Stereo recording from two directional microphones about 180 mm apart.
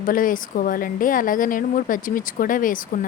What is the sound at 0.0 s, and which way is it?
A woman's voice, 50° left (ahead or behind).